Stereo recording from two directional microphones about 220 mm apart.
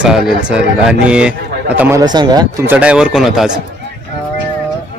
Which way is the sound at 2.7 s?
5° right (ahead or behind).